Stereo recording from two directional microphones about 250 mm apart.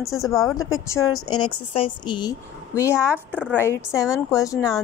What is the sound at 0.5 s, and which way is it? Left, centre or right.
Speech, left.